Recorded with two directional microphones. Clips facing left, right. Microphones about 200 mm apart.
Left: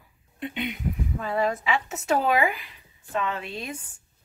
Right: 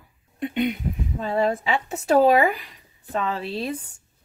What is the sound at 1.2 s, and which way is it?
Speech, 30° right (ahead or behind).